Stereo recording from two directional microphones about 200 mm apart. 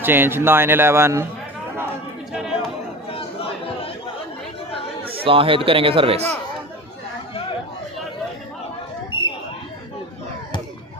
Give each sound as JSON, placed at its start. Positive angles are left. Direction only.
{"t": 0.0, "sound": "a man's voice", "side_deg": -10}
{"t": 2.3, "sound": "chatter", "side_deg": 0}
{"t": 3.1, "sound": "chatter", "side_deg": 25}
{"t": 5.1, "sound": "speech", "side_deg": -25}